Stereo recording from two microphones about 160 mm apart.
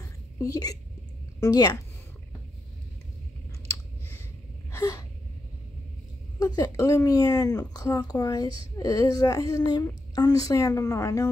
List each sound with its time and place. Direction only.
0.4 s a child's voice: 20° left (ahead or behind)
4.6 s gasp: 20° left (ahead or behind)
6.4 s a child's voice: 20° left (ahead or behind)